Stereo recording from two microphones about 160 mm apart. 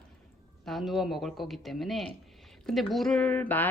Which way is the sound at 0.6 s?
Centre (ahead or behind).